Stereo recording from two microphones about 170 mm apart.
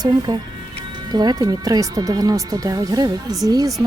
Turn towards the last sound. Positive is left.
turn(degrees=-20)  # may be behind; listen again after turning